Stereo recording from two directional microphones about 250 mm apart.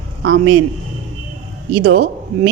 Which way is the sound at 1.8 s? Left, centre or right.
Right.